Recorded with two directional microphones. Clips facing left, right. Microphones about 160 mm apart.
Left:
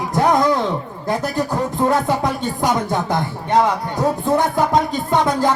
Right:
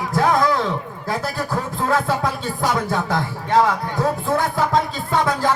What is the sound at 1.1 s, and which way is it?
Music, 20° left (ahead or behind).